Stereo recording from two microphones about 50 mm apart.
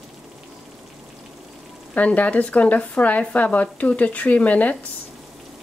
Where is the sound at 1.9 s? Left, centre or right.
Left.